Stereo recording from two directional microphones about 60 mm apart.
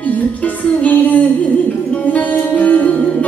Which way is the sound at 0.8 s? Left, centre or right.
Left.